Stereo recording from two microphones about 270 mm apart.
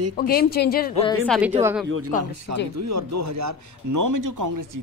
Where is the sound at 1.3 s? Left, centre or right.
Centre.